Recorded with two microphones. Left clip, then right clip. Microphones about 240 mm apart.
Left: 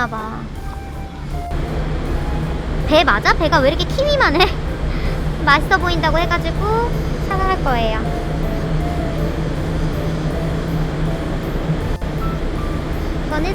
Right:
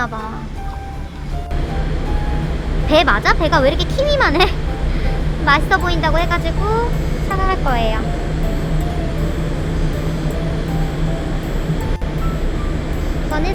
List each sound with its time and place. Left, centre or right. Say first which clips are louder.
2.9 s speech: even; centre